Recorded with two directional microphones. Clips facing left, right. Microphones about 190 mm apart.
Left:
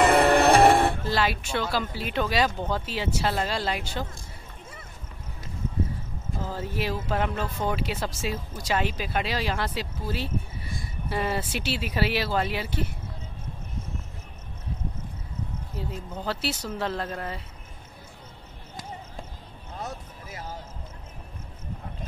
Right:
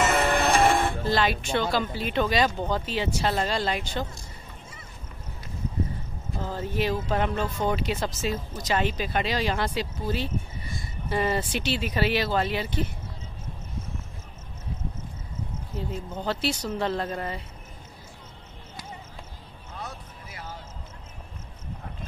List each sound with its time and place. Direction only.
0.0 s music: 35° left (ahead or behind)
1.1 s speech: 5° left (ahead or behind)
6.3 s speech: 5° left (ahead or behind)
16.2 s speech: 5° left (ahead or behind)
19.8 s vehicle: 40° left (ahead or behind)